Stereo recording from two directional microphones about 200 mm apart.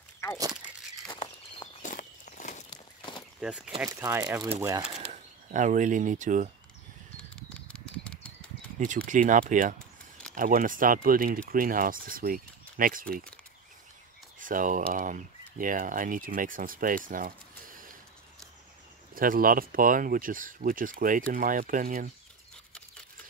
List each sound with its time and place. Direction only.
1.2 s walk: 35° left (ahead or behind)
2.7 s walk: 25° left (ahead or behind)
3.3 s speech: 5° right (ahead or behind)
3.9 s speech: 15° right (ahead or behind)
5.1 s speech: 40° right (ahead or behind)
7.3 s bird flight: 5° left (ahead or behind)
8.7 s speech: 40° right (ahead or behind)
14.4 s speech: 40° right (ahead or behind)
19.1 s speech: 45° right (ahead or behind)